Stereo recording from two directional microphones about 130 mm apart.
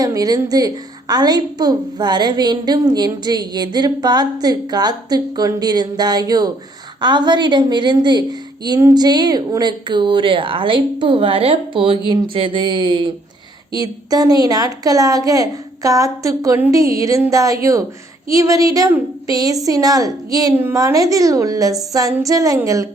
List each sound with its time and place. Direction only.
0.0 s a woman's voice: 30° right (ahead or behind)
13.7 s a woman's voice: 30° right (ahead or behind)